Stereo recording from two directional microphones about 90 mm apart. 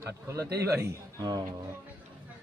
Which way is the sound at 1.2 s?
45° right (ahead or behind).